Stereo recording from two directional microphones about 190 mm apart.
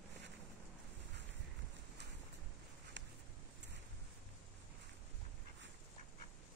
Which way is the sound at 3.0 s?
70° right (ahead or behind).